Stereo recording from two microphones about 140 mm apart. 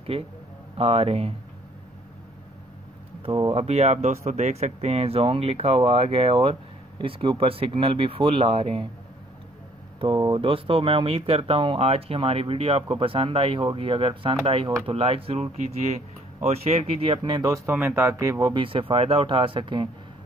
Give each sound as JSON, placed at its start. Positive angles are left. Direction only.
{"t": 0.1, "sound": "speech", "side_deg": -45}
{"t": 3.2, "sound": "speech", "side_deg": -45}
{"t": 9.9, "sound": "speech", "side_deg": -35}